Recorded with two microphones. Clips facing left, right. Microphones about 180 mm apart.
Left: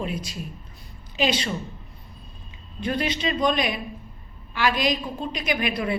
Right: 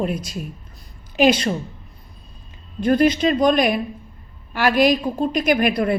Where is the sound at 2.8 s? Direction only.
45° right (ahead or behind).